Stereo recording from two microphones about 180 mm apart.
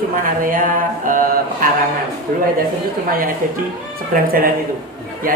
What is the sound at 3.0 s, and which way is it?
Speech, 50° right (ahead or behind).